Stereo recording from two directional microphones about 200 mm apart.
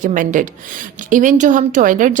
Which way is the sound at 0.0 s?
40° right (ahead or behind).